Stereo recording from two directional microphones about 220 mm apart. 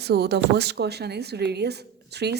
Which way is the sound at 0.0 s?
50° right (ahead or behind).